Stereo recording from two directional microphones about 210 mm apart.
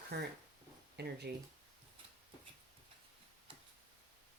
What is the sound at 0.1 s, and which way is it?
Speech, 50° right (ahead or behind).